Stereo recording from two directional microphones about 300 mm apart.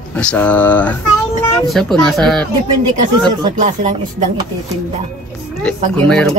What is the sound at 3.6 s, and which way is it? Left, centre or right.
Speech, right.